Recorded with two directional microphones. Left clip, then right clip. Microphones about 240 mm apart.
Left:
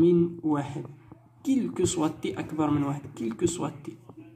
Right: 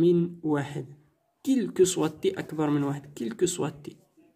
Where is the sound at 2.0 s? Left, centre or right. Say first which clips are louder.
Right 2 dB; right.